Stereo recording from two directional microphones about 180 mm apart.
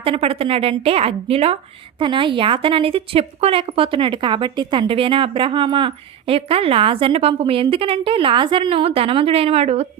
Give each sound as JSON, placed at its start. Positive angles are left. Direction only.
{"t": 0.0, "sound": "a woman's voice", "side_deg": -30}